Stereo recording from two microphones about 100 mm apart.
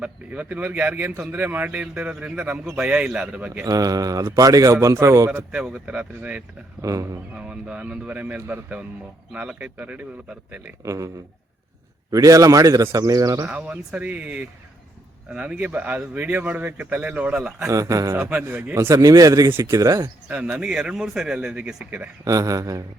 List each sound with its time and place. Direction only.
0.0 s speech: 15° right (ahead or behind)
3.7 s speech: 35° right (ahead or behind)
5.5 s speech: 10° right (ahead or behind)
6.8 s speech: 35° right (ahead or behind)
7.3 s speech: 10° right (ahead or behind)
10.8 s speech: 30° right (ahead or behind)
12.1 s speech: 35° right (ahead or behind)
13.5 s speech: 15° right (ahead or behind)
17.7 s speech: 35° right (ahead or behind)
18.3 s speech: 15° right (ahead or behind)
18.7 s speech: 30° right (ahead or behind)
19.5 s speech: 25° right (ahead or behind)
20.2 s speech: 10° right (ahead or behind)
22.2 s speech: 35° right (ahead or behind)